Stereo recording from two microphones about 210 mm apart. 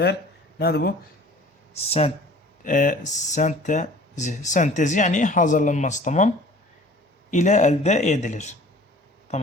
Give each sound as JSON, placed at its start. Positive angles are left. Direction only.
{"t": 0.6, "sound": "speech", "side_deg": 50}
{"t": 1.7, "sound": "speech", "side_deg": 30}